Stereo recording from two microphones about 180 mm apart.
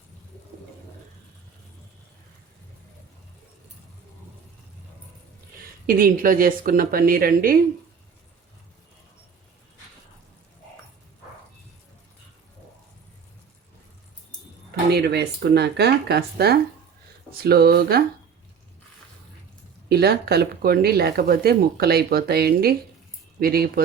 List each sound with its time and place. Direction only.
5.8 s a woman's voice: 50° right (ahead or behind)
14.8 s speech: 65° right (ahead or behind)
19.9 s speech: 60° right (ahead or behind)